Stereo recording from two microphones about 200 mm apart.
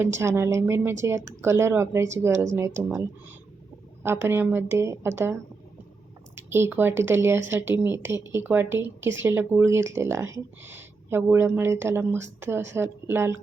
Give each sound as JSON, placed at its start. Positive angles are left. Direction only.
{"t": 0.2, "sound": "a woman's voice", "side_deg": -15}
{"t": 9.0, "sound": "speech", "side_deg": -70}
{"t": 9.2, "sound": "speech", "side_deg": -10}